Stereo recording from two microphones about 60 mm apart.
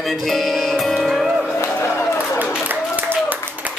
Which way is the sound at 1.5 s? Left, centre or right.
Left.